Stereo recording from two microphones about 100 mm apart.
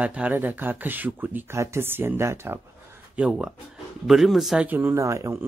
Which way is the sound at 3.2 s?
10° right (ahead or behind).